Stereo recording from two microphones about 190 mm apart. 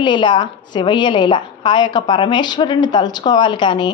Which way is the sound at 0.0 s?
25° left (ahead or behind).